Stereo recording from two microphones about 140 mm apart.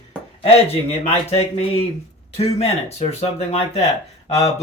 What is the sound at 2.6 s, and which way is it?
Speech, 50° left (ahead or behind).